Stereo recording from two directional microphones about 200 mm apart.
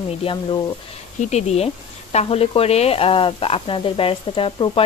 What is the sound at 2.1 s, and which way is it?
Sizzle, 30° left (ahead or behind).